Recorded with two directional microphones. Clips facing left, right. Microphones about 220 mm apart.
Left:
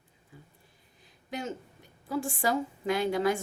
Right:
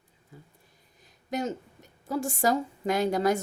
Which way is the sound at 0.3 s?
40° right (ahead or behind).